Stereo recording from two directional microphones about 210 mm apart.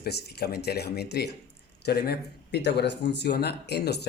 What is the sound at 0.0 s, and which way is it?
Speech, 50° left (ahead or behind).